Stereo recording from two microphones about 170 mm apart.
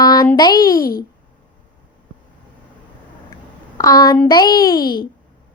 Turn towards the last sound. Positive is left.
turn(degrees=25)  # may be behind; listen again after turning